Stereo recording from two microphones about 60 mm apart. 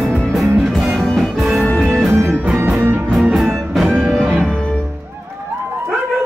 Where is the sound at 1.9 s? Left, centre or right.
Right.